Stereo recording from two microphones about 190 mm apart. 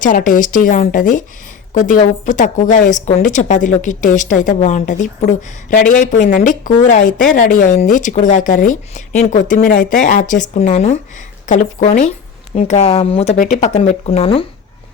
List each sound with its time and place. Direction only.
0.0 s a woman's voice: 45° left (ahead or behind)